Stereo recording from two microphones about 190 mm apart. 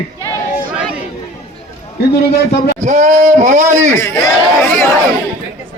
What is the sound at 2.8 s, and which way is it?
Speech, 40° right (ahead or behind).